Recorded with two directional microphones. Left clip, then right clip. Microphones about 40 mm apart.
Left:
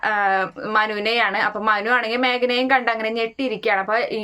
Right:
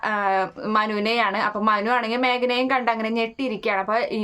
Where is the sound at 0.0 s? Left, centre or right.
Right.